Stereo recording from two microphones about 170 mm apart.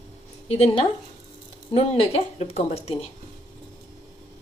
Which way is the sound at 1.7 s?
35° left (ahead or behind).